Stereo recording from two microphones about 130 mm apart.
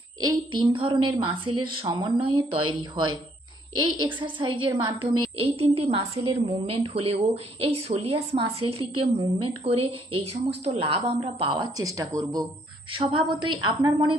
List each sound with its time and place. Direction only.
0.2 s a woman's voice: 35° right (ahead or behind)
11.8 s speech: 25° right (ahead or behind)
13.0 s a woman's voice: 40° right (ahead or behind)